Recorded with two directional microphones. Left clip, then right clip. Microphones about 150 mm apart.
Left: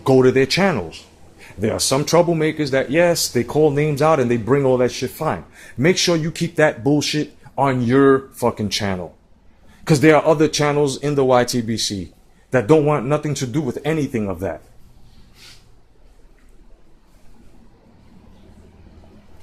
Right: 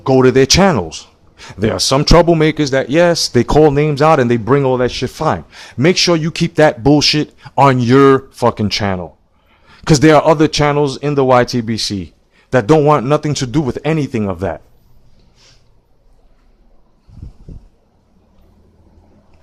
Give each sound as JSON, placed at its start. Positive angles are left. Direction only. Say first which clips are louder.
{"t": 0.0, "sound": "speech", "louder": "right 4 dB", "side_deg": -40}
{"t": 1.6, "sound": "speech", "louder": "right 6 dB", "side_deg": -40}
{"t": 3.1, "sound": "speech", "louder": "right 6 dB", "side_deg": -50}
{"t": 3.7, "sound": "speech", "louder": "right 5 dB", "side_deg": -45}
{"t": 9.8, "sound": "speech", "louder": "right 5 dB", "side_deg": -60}
{"t": 12.5, "sound": "speech", "louder": "right 5 dB", "side_deg": -55}